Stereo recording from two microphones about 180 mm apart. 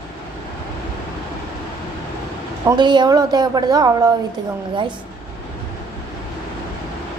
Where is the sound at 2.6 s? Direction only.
25° right (ahead or behind).